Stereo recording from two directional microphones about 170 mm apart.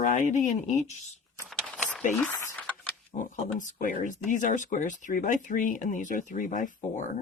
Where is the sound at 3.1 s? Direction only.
45° left (ahead or behind).